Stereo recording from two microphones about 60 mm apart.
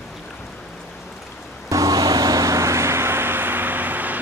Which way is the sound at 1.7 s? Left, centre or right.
Right.